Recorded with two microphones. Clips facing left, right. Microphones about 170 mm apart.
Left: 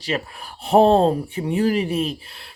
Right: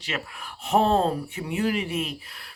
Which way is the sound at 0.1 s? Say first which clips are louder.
Left 6 dB; 35° left (ahead or behind).